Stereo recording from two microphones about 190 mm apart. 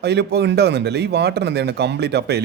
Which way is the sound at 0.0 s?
60° right (ahead or behind).